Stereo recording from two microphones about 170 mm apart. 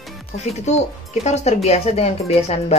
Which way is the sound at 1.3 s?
40° left (ahead or behind).